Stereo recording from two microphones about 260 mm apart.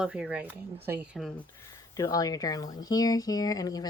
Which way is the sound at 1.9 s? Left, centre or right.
Centre.